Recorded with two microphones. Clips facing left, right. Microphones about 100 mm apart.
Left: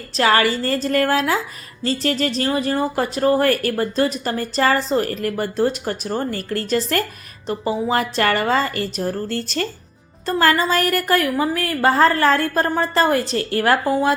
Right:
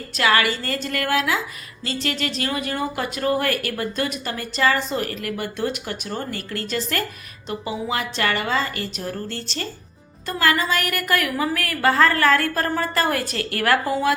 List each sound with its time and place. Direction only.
0.2 s speech: 35° left (ahead or behind)
10.2 s a woman's voice: 35° left (ahead or behind)